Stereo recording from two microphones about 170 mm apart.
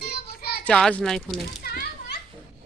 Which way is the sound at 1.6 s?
60° left (ahead or behind).